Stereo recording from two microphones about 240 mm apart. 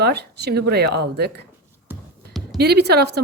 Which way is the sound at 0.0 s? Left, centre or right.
Right.